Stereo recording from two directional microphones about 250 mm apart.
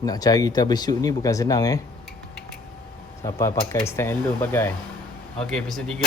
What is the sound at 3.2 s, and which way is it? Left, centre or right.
A man's voice, centre.